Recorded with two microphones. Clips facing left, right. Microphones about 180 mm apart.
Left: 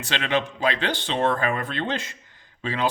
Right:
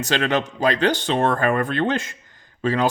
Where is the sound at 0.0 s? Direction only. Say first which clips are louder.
Right 4 dB; 45° right (ahead or behind).